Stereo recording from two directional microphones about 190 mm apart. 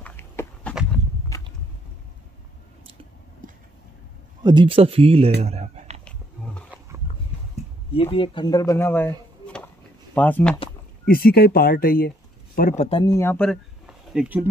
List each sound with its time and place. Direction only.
0.0 s walk: 10° left (ahead or behind)
4.4 s speech: 25° right (ahead or behind)
5.4 s a sound: 35° right (ahead or behind)
6.0 s roaring cats: 5° left (ahead or behind)
7.9 s speech: 30° left (ahead or behind); by 10.6 s 5° left (ahead or behind)
11.1 s speech: 50° left (ahead or behind); by 13.0 s 35° left (ahead or behind)
13.0 s speech: 15° left (ahead or behind); by 14.5 s 5° right (ahead or behind)